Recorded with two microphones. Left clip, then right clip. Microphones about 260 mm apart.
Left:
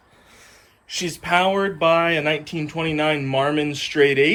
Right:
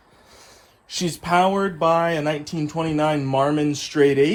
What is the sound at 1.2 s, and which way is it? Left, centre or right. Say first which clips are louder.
Speech: even; right.